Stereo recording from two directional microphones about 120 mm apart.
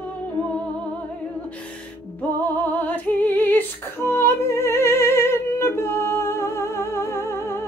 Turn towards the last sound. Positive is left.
turn(degrees=20)  # may be behind; listen again after turning